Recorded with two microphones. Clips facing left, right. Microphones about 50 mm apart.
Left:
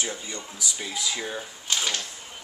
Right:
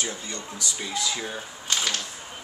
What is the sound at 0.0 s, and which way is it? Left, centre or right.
Speech, centre.